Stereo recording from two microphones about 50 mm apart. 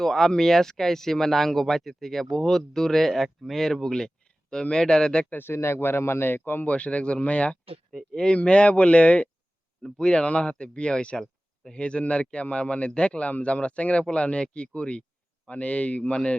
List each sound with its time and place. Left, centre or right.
0.0 s speech: centre
5.4 s speech: left
6.7 s speech: left